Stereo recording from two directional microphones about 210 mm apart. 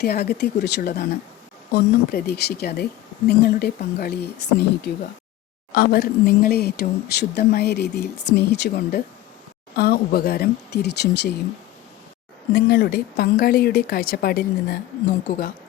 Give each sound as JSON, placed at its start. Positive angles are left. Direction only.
{"t": 0.0, "sound": "speech", "side_deg": 50}
{"t": 5.7, "sound": "speech", "side_deg": 50}
{"t": 12.5, "sound": "speech", "side_deg": 45}